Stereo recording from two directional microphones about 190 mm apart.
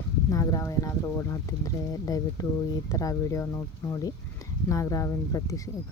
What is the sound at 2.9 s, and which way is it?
Speech, 15° left (ahead or behind).